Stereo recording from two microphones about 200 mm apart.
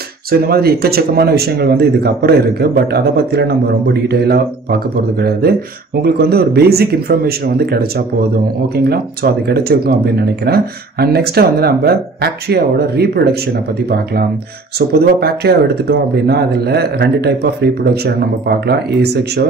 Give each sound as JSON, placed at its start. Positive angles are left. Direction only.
{"t": 0.3, "sound": "speech", "side_deg": -50}